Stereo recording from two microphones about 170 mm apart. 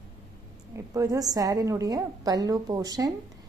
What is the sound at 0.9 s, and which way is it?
A woman's voice, 20° right (ahead or behind).